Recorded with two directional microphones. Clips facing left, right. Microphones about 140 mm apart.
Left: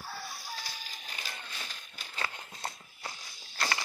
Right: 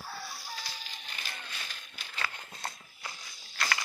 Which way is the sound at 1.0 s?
40° left (ahead or behind).